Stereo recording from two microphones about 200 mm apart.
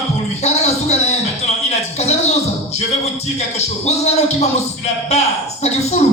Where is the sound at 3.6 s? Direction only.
35° left (ahead or behind).